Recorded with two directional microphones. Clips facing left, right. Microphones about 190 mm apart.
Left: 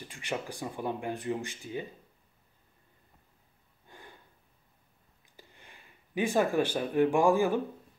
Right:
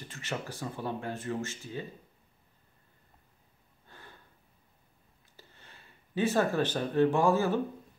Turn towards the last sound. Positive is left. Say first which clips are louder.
# left 1 dB
turn(degrees=15)  # may be behind; listen again after turning